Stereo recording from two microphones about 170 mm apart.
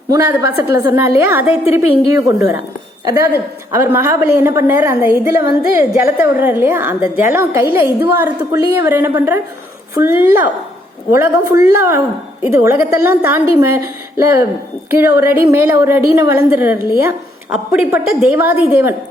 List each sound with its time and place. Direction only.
0.1 s a woman's voice: 15° right (ahead or behind)